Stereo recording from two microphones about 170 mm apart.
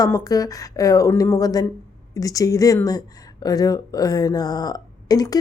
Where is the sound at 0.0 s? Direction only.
20° left (ahead or behind).